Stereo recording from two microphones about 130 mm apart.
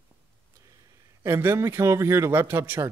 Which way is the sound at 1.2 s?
20° right (ahead or behind).